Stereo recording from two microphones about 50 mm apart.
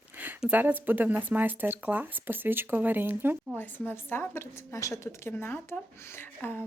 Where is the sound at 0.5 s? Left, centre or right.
Right.